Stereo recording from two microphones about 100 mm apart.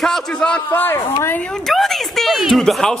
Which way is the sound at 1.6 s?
Centre (ahead or behind).